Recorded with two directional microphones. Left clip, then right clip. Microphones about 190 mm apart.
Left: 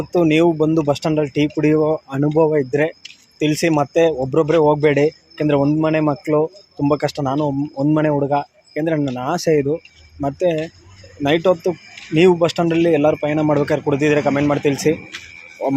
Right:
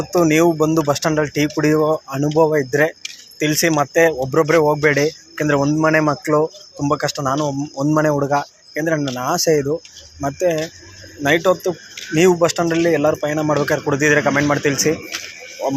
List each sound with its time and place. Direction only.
0.0 s speech: 20° left (ahead or behind)
4.1 s speech: 10° left (ahead or behind)
4.4 s speech: 25° left (ahead or behind)
6.8 s speech: 30° left (ahead or behind)
15.1 s speech: 55° right (ahead or behind)